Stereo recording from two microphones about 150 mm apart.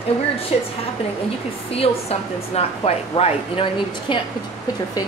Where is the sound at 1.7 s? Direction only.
40° left (ahead or behind).